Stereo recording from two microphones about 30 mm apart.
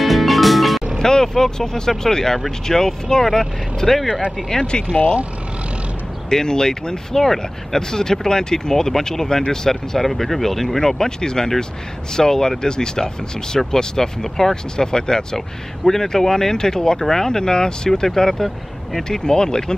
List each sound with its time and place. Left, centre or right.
0.0 s music: centre
0.9 s speech: centre
4.5 s speech: left
6.3 s speech: left
18.0 s speech: centre